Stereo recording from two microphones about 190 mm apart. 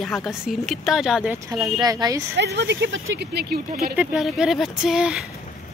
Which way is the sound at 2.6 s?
70° right (ahead or behind).